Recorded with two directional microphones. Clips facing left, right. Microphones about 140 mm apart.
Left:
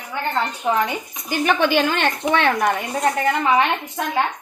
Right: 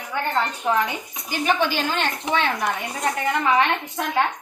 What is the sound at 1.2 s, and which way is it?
A woman's voice, 60° left (ahead or behind).